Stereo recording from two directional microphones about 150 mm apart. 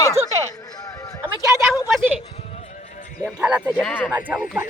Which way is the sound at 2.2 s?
45° left (ahead or behind).